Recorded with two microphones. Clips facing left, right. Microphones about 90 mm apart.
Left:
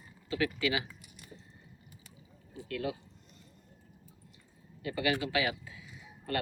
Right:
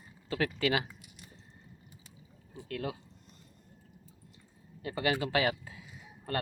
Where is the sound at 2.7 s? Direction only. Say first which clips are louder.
Left 1 dB; 45° right (ahead or behind).